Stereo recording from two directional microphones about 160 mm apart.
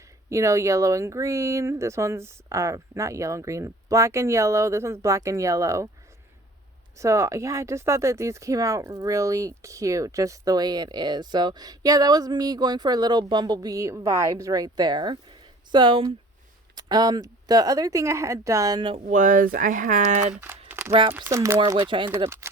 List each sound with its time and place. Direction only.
0.3 s speech: 20° right (ahead or behind)
7.0 s speech: 20° right (ahead or behind)
19.0 s speech: 55° right (ahead or behind)
20.3 s crumpling: 10° right (ahead or behind)
21.2 s speech: 20° right (ahead or behind)
21.8 s speech: 30° right (ahead or behind)